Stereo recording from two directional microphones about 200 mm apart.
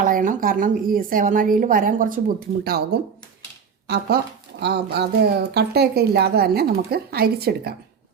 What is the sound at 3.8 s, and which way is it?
Speech, 55° right (ahead or behind).